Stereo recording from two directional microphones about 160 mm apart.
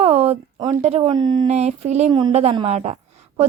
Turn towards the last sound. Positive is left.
turn(degrees=-45)  # may be behind; listen again after turning